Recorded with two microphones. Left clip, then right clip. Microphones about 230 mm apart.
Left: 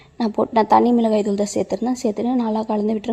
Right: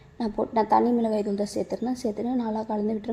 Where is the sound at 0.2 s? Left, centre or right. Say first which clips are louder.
Left 7 dB; left.